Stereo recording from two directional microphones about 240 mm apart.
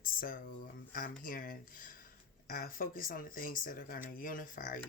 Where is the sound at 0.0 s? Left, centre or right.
Left.